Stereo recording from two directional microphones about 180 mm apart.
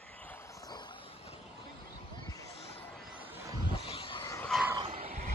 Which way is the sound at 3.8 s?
30° left (ahead or behind).